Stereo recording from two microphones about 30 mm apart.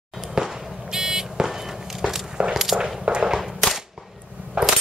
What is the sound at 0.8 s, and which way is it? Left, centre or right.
Buzzer, centre.